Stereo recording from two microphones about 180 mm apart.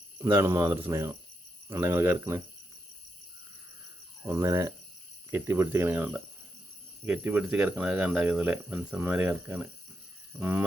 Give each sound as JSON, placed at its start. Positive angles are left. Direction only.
{"t": 0.2, "sound": "speech", "side_deg": -15}
{"t": 4.3, "sound": "speech", "side_deg": -15}